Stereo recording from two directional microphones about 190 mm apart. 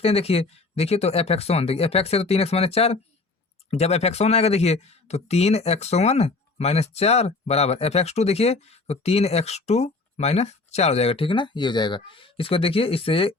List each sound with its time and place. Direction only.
0.0 s speech: 30° left (ahead or behind)